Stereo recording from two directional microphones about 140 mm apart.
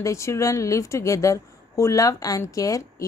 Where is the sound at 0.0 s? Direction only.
20° left (ahead or behind).